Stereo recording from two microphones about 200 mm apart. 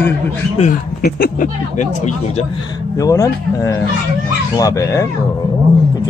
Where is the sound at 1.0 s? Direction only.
45° left (ahead or behind).